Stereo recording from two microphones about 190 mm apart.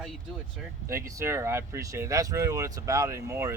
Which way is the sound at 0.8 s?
15° right (ahead or behind).